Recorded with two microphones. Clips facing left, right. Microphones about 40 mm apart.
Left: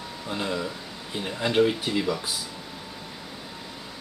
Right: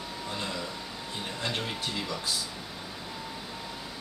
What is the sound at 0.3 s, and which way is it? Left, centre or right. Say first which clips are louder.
Speech: left 7 dB; centre.